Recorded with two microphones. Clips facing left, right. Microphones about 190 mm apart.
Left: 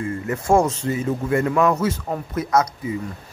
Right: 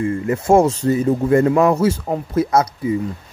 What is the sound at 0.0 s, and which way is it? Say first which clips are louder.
Speech: right 6 dB; 25° right (ahead or behind).